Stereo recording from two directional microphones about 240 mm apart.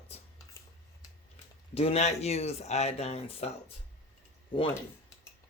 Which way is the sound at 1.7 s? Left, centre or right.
Left.